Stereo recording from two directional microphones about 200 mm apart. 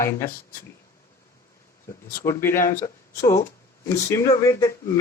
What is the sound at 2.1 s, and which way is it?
Speech, 15° left (ahead or behind).